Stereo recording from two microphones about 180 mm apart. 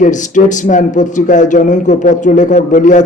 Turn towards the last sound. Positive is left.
turn(degrees=45)  # may be behind; listen again after turning